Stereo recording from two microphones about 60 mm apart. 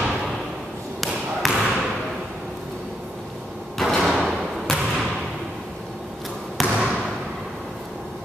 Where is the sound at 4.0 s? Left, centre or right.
Centre.